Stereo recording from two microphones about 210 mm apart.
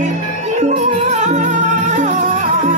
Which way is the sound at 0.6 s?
35° right (ahead or behind).